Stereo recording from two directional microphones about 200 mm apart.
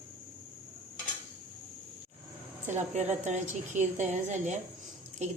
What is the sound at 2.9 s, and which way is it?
A woman's voice, 35° right (ahead or behind).